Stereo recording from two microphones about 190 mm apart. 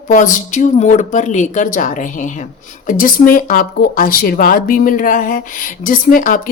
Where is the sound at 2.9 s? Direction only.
45° left (ahead or behind).